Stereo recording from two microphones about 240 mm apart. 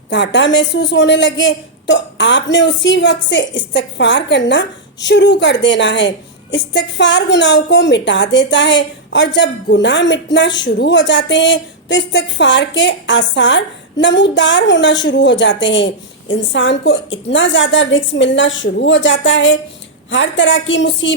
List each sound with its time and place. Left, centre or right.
0.1 s a woman's voice: left